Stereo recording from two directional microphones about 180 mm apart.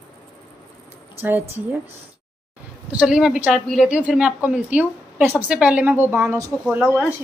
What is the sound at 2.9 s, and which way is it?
A woman's voice, 5° right (ahead or behind).